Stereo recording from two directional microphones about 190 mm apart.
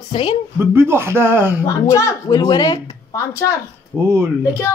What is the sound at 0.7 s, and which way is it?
Speech, 15° right (ahead or behind).